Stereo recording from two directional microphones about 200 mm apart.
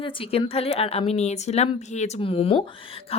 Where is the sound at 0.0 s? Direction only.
25° left (ahead or behind).